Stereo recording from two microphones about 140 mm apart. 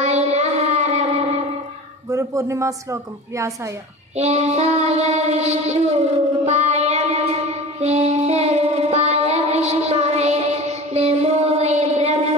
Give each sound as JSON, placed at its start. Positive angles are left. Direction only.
{"t": 0.0, "sound": "music", "side_deg": -50}
{"t": 2.0, "sound": "a woman's voice", "side_deg": -20}
{"t": 4.2, "sound": "child singing", "side_deg": -50}